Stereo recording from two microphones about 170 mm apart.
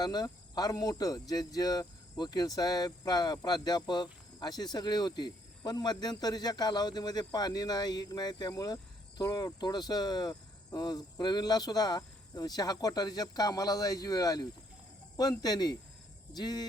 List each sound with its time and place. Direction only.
0.0 s speech: 25° left (ahead or behind)